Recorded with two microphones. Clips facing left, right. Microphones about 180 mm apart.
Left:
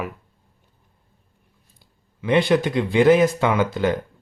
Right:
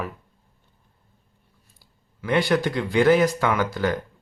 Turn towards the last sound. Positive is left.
turn(degrees=20)  # may be behind; listen again after turning